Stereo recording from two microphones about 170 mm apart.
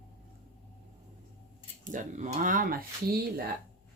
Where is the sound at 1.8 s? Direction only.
50° right (ahead or behind); by 3.5 s 65° right (ahead or behind).